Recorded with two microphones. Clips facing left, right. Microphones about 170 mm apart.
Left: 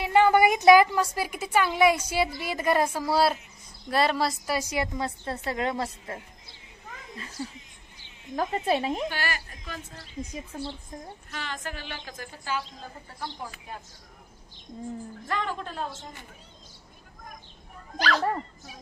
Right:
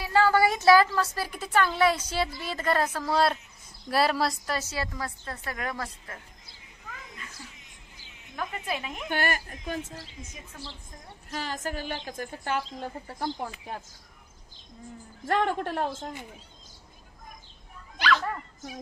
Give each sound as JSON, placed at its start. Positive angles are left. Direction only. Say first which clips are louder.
{"t": 0.0, "sound": "a woman's voice", "louder": "left 3 dB", "side_deg": 20}
{"t": 4.5, "sound": "a woman's voice", "louder": "left 3 dB", "side_deg": 15}
{"t": 8.4, "sound": "speech", "louder": "left 7 dB", "side_deg": 35}
{"t": 9.1, "sound": "a woman's voice", "louder": "right 4 dB", "side_deg": -50}
{"t": 10.3, "sound": "speech", "louder": "left 9 dB", "side_deg": 30}
{"t": 11.2, "sound": "a woman's voice", "louder": "right 5 dB", "side_deg": -40}
{"t": 12.1, "sound": "a woman's voice", "louder": "even", "side_deg": -55}
{"t": 15.2, "sound": "a woman's voice", "louder": "right 6 dB", "side_deg": -60}
{"t": 17.9, "sound": "speech", "louder": "left 1 dB", "side_deg": 40}